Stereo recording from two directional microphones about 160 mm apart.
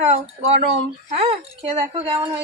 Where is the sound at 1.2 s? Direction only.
35° right (ahead or behind).